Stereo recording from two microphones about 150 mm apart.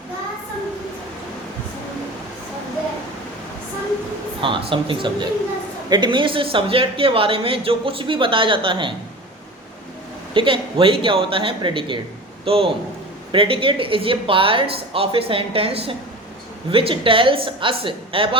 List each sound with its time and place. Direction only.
4.4 s speech: 35° right (ahead or behind)
10.3 s speech: 35° right (ahead or behind)